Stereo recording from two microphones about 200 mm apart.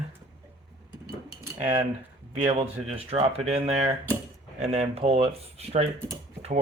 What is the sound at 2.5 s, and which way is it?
Speech, 30° right (ahead or behind).